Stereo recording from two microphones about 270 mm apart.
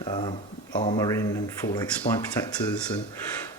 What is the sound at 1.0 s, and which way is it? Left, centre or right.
Speech, centre.